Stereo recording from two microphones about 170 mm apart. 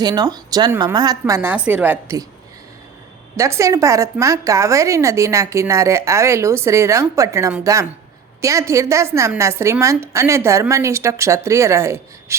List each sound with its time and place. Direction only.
0.0 s speech: 25° right (ahead or behind)
1.3 s a woman's voice: 10° right (ahead or behind)
3.3 s a woman's voice: 15° right (ahead or behind)